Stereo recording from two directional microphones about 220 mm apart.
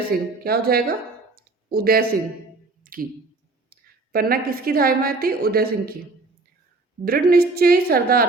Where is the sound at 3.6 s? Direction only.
40° right (ahead or behind).